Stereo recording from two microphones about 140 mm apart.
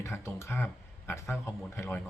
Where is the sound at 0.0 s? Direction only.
20° left (ahead or behind).